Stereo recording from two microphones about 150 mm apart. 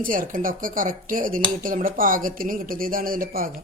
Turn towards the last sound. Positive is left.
turn(degrees=-70)  # may be behind; listen again after turning